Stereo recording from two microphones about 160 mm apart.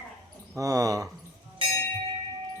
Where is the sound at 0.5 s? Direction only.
20° right (ahead or behind).